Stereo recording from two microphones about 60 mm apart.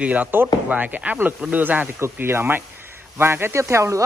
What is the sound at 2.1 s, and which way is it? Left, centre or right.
Speech, right.